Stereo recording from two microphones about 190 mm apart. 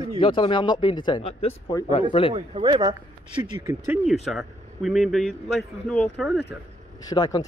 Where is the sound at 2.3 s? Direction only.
25° right (ahead or behind).